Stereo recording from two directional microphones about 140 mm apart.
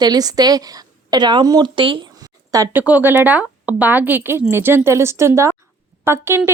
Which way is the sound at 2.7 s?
10° right (ahead or behind).